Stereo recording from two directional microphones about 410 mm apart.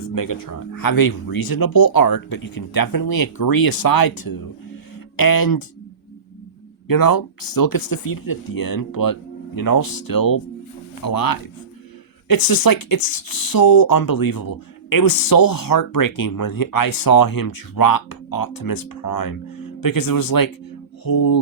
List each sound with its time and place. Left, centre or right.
0.0 s speech: left
6.8 s speech: left